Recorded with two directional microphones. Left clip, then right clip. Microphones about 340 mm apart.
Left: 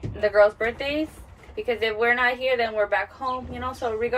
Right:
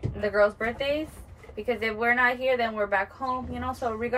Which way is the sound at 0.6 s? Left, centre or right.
Centre.